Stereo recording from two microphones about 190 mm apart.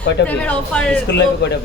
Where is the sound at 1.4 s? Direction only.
65° left (ahead or behind).